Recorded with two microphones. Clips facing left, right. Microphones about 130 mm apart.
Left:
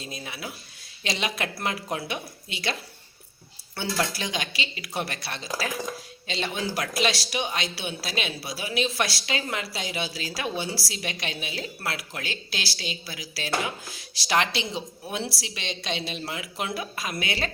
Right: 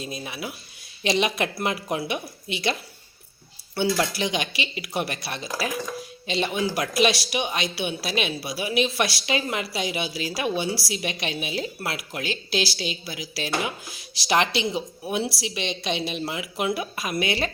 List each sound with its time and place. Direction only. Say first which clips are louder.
0.0 s a woman's voice: right 4 dB; 15° right (ahead or behind)
4.2 s a woman's voice: right 4 dB; 15° right (ahead or behind)